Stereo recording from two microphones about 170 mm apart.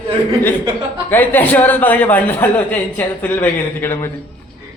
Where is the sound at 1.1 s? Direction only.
10° left (ahead or behind).